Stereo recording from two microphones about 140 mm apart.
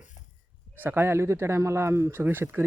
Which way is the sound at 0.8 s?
15° right (ahead or behind).